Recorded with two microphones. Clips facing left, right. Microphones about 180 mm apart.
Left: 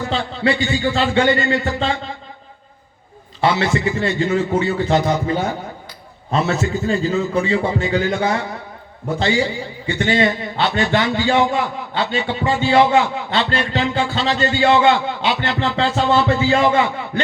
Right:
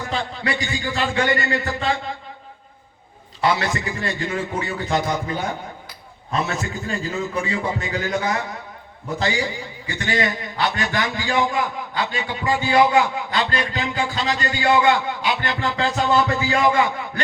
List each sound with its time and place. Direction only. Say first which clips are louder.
0.1 s a man's voice: left 6 dB; 25° left (ahead or behind)
3.4 s a man's voice: left 4 dB; 25° left (ahead or behind)
6.3 s a man's voice: left 6 dB; 25° left (ahead or behind)